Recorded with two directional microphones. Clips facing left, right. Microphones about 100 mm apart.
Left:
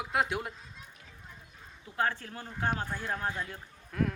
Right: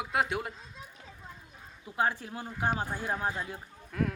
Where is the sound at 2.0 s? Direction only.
15° right (ahead or behind).